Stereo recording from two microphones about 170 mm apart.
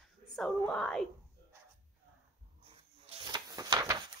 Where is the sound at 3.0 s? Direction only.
25° right (ahead or behind).